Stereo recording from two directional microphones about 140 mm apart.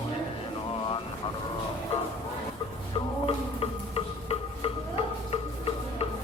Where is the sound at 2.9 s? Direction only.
40° left (ahead or behind).